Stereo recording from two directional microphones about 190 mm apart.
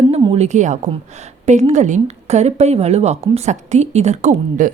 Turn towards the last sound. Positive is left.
turn(degrees=-40)  # may be behind; listen again after turning